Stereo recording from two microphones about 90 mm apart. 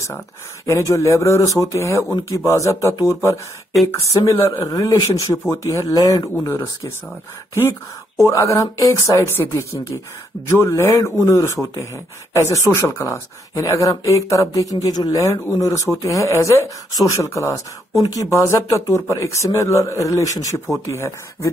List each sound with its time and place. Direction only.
0.7 s speech: 35° left (ahead or behind)
4.1 s speech: 45° left (ahead or behind)
6.4 s speech: 30° left (ahead or behind)
8.3 s speech: 35° left (ahead or behind)
9.3 s speech: 25° left (ahead or behind)